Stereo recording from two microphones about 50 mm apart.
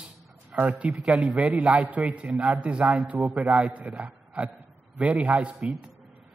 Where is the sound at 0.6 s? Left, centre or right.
Right.